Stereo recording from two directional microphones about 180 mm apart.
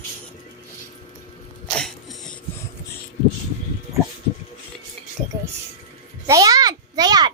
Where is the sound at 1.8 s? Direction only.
5° left (ahead or behind).